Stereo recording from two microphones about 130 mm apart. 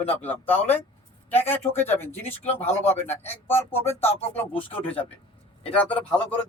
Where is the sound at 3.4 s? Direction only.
15° left (ahead or behind).